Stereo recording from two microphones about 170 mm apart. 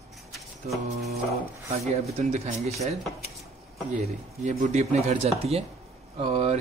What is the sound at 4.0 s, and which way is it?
Speech, 45° right (ahead or behind).